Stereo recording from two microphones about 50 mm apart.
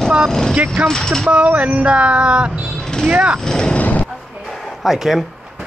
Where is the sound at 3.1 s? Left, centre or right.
Right.